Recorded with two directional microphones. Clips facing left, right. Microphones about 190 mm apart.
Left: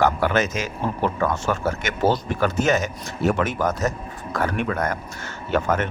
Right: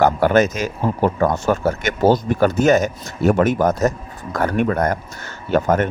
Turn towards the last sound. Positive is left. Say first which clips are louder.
# right 5 dB
turn(degrees=-40)  # may be behind; listen again after turning